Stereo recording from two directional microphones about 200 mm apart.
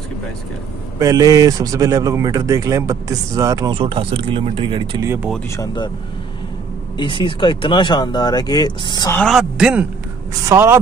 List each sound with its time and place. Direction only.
0.9 s a man's voice: 20° right (ahead or behind)
7.0 s speech: 25° left (ahead or behind)
9.2 s a man's voice: centre (ahead or behind)